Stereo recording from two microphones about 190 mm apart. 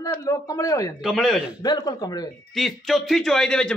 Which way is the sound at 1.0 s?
Centre (ahead or behind).